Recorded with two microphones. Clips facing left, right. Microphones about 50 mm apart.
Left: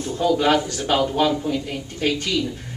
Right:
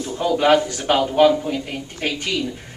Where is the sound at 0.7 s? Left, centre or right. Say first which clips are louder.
Right 1 dB; right.